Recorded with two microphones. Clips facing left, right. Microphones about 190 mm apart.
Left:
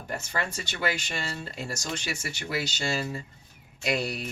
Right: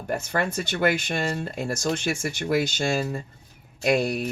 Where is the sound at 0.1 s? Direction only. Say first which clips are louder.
Right 7 dB; 55° right (ahead or behind).